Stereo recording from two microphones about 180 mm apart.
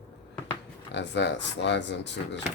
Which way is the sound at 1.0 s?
75° left (ahead or behind).